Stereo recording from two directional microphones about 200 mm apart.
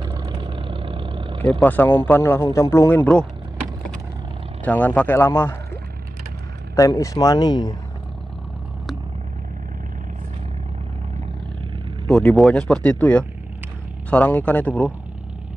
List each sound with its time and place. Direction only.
0.0 s vehicle: 20° right (ahead or behind)
1.4 s speech: 5° left (ahead or behind)
4.6 s speech: 10° left (ahead or behind)
6.7 s speech: 15° left (ahead or behind)
12.1 s speech: centre (ahead or behind)